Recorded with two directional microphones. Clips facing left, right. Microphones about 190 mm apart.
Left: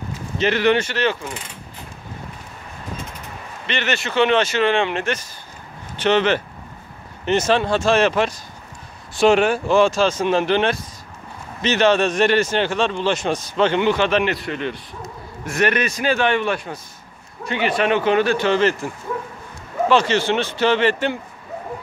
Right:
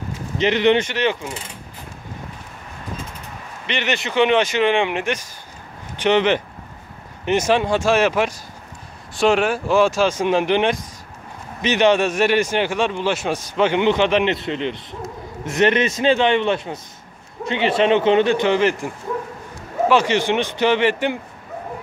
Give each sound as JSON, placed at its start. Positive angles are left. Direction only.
{"t": 0.4, "sound": "a man's voice", "side_deg": -20}
{"t": 3.6, "sound": "a man's voice", "side_deg": -15}
{"t": 9.1, "sound": "a man's voice", "side_deg": 0}
{"t": 19.9, "sound": "a man's voice", "side_deg": -10}